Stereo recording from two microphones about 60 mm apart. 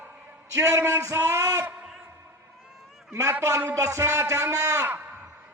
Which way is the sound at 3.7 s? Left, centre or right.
Right.